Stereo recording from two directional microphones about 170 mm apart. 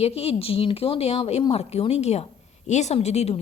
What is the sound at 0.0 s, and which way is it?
Speech, 35° left (ahead or behind).